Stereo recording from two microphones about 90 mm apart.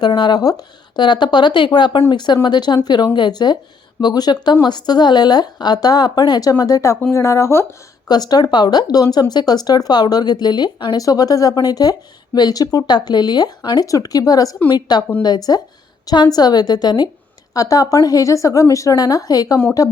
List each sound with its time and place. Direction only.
0.0 s speech: 55° left (ahead or behind); by 7.7 s 30° left (ahead or behind)
8.0 s speech: 50° left (ahead or behind)
13.8 s speech: 40° left (ahead or behind)
17.5 s speech: 40° left (ahead or behind)